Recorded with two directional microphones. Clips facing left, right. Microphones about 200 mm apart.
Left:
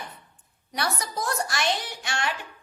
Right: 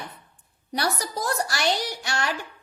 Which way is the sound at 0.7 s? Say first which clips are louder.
Right 2 dB; 35° right (ahead or behind).